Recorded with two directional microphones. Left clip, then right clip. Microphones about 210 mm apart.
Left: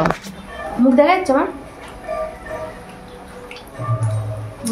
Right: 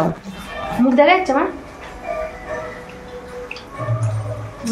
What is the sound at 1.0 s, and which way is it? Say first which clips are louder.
Speech: right 1 dB; 10° left (ahead or behind).